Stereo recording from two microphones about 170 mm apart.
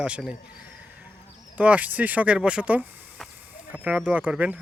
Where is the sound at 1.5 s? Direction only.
10° right (ahead or behind).